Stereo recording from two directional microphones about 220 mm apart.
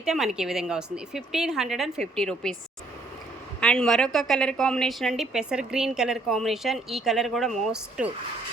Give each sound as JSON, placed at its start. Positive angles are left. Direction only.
{"t": 0.0, "sound": "a woman's voice", "side_deg": 0}
{"t": 3.6, "sound": "a woman's voice", "side_deg": 5}